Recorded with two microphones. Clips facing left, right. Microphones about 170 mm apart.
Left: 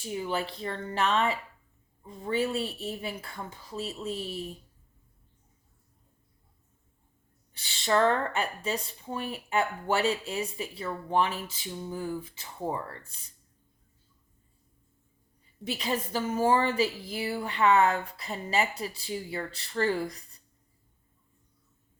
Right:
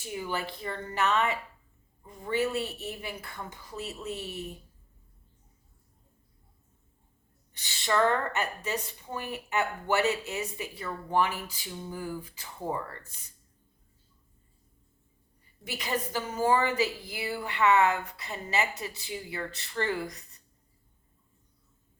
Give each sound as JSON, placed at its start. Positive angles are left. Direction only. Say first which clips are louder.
{"t": 0.2, "sound": "speech", "louder": "left 2 dB", "side_deg": 30}
{"t": 7.5, "sound": "speech", "louder": "left 2 dB", "side_deg": 30}
{"t": 15.6, "sound": "speech", "louder": "left 2 dB", "side_deg": 30}